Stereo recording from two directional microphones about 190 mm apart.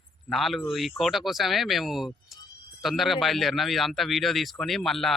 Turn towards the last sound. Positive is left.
turn(degrees=0)  # may be behind; listen again after turning